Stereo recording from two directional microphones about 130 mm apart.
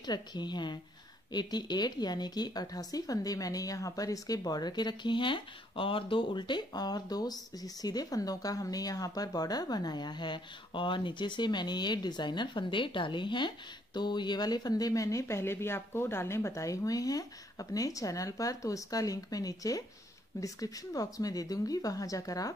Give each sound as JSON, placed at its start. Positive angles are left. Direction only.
{"t": 0.0, "sound": "speech", "side_deg": 30}